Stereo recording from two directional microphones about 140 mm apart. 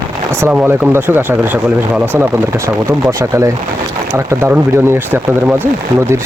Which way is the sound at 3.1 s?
20° right (ahead or behind).